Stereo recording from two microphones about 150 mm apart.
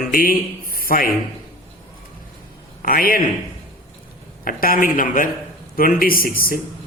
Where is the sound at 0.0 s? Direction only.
70° left (ahead or behind).